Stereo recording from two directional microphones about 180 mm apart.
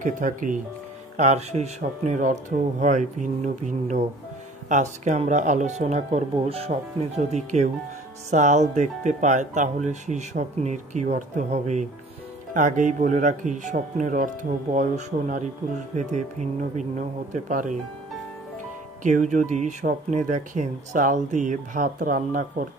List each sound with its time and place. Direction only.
0.0 s speech: 45° right (ahead or behind)
19.0 s speech: 45° right (ahead or behind)